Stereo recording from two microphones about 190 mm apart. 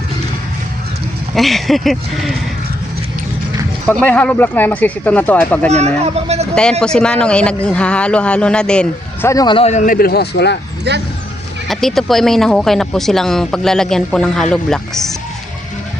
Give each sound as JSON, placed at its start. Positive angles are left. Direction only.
{"t": 1.4, "sound": "speech", "side_deg": 0}
{"t": 4.0, "sound": "speech", "side_deg": 10}
{"t": 5.7, "sound": "speech", "side_deg": -35}
{"t": 6.5, "sound": "speech", "side_deg": 5}
{"t": 9.3, "sound": "a man's voice", "side_deg": 20}
{"t": 10.9, "sound": "speech", "side_deg": -60}
{"t": 11.7, "sound": "speech", "side_deg": 0}